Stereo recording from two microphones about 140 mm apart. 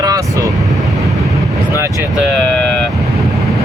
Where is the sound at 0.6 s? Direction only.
Centre (ahead or behind).